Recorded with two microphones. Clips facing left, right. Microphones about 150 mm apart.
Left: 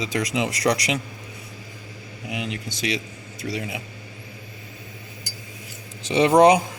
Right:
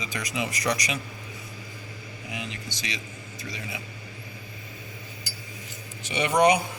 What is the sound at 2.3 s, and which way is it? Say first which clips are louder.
Speech: left 7 dB; 80° left.